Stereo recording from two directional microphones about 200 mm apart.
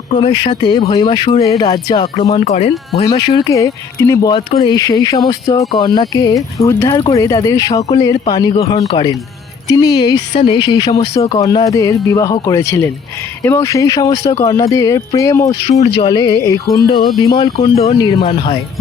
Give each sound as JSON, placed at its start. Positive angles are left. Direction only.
{"t": 0.2, "sound": "speech", "side_deg": 25}
{"t": 2.1, "sound": "speech", "side_deg": 35}
{"t": 3.1, "sound": "speech", "side_deg": 20}